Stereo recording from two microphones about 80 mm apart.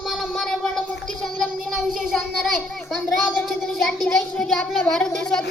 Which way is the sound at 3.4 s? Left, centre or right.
Centre.